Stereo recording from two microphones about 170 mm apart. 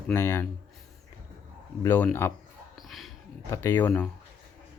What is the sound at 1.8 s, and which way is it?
Speech, 15° left (ahead or behind).